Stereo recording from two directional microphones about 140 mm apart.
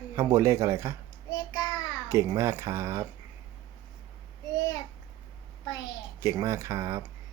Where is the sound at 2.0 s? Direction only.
20° right (ahead or behind).